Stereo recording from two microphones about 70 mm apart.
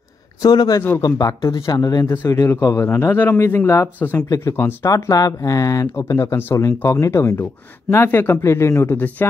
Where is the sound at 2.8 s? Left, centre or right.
Left.